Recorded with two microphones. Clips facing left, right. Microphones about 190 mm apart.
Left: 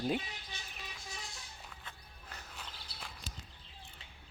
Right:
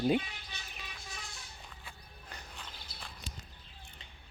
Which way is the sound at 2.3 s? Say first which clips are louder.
Even; 5° left (ahead or behind).